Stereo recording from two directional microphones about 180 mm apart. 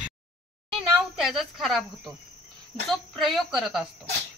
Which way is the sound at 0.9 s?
Centre (ahead or behind).